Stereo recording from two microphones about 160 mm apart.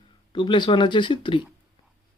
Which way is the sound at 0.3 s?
30° left (ahead or behind).